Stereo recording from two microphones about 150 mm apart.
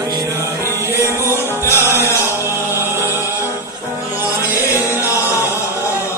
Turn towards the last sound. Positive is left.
turn(degrees=20)  # may be behind; listen again after turning